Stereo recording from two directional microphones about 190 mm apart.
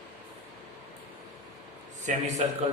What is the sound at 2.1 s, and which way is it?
Speech, 40° right (ahead or behind).